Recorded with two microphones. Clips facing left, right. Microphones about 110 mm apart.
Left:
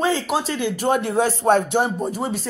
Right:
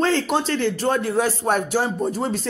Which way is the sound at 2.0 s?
10° left (ahead or behind).